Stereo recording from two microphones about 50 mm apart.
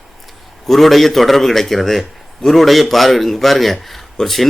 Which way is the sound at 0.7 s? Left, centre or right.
Centre.